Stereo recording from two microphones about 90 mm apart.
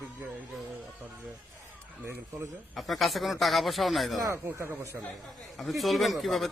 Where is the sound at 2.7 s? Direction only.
Centre (ahead or behind).